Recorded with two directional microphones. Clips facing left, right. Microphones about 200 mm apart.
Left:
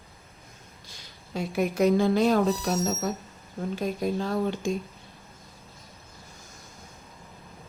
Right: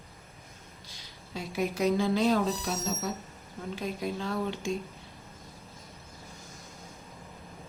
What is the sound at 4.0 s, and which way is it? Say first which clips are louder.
Speech: left 5 dB; 40° left (ahead or behind).